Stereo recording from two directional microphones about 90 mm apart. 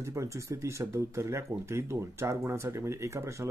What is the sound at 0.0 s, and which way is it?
Speech, 35° right (ahead or behind).